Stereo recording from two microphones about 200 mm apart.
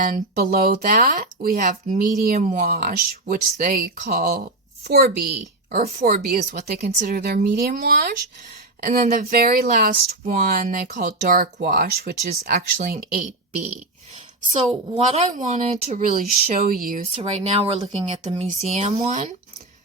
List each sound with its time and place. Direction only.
0.0 s a woman's voice: 45° right (ahead or behind)
5.8 s speech: 40° right (ahead or behind)
14.5 s speech: 30° right (ahead or behind); by 17.1 s 45° right (ahead or behind)
17.2 s speech: 30° right (ahead or behind)